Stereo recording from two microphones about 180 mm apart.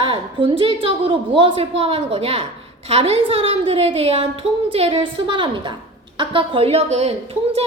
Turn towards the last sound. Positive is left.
turn(degrees=-35)  # may be behind; listen again after turning